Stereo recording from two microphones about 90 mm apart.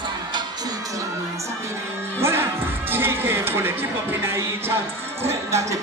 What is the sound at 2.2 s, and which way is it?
Music, 30° right (ahead or behind).